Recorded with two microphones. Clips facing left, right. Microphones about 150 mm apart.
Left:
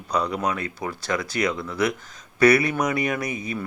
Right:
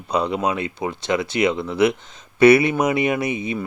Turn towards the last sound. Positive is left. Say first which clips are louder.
# right 5 dB
turn(degrees=-25)  # may be behind; listen again after turning